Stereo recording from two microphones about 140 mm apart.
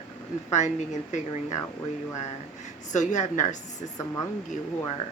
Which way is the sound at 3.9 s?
20° left (ahead or behind).